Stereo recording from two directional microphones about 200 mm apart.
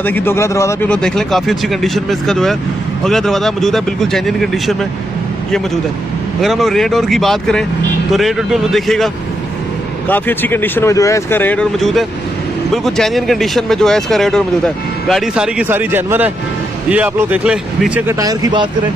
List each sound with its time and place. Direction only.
0.0 s speech: 10° left (ahead or behind)
6.4 s speech: centre (ahead or behind)
18.2 s speech: 20° right (ahead or behind)